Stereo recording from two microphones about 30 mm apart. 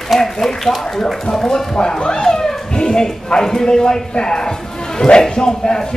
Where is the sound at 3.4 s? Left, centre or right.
Centre.